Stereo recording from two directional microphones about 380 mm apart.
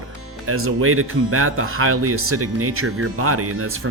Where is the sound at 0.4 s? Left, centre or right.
Right.